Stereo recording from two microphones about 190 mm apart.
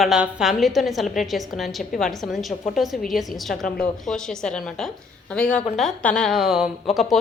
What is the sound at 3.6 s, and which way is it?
Speech, 50° left (ahead or behind).